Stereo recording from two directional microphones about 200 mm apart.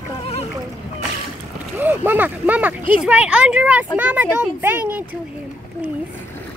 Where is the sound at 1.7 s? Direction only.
10° right (ahead or behind).